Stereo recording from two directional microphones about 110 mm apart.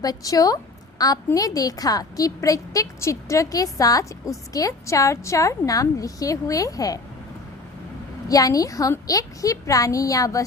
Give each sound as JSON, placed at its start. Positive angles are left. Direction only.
{"t": 0.0, "sound": "a woman's voice", "side_deg": 35}
{"t": 8.3, "sound": "a woman's voice", "side_deg": 30}